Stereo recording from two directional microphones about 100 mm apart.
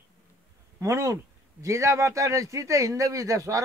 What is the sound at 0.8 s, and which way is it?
A man's voice, 30° right (ahead or behind).